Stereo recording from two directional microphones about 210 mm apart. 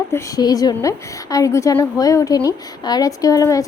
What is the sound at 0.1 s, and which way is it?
Speech, 15° left (ahead or behind).